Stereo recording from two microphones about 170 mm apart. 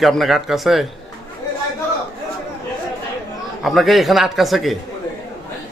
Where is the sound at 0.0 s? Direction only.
Centre (ahead or behind).